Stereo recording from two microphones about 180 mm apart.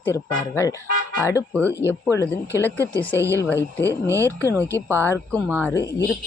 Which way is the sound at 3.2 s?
15° right (ahead or behind).